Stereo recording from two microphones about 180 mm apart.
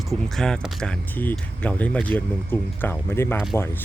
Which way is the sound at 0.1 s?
5° left (ahead or behind).